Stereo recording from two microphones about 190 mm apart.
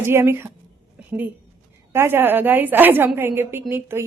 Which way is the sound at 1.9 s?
10° right (ahead or behind).